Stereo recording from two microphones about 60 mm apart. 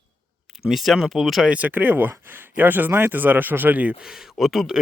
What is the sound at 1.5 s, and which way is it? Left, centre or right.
Speech, right.